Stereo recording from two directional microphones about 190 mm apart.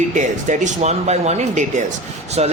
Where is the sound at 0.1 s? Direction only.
40° right (ahead or behind).